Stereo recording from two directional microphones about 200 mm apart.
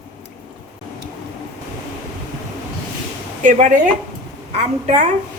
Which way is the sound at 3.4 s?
40° right (ahead or behind).